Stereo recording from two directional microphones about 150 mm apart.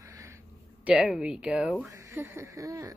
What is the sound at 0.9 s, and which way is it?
Speech, 5° right (ahead or behind).